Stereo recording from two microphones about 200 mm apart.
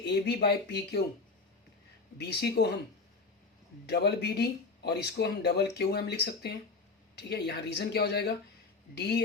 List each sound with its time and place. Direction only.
0.0 s speech: 55° left (ahead or behind)
2.1 s speech: 55° left (ahead or behind)
3.8 s speech: 55° left (ahead or behind)